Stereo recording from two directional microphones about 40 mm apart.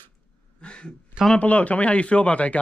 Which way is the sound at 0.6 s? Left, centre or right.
Left.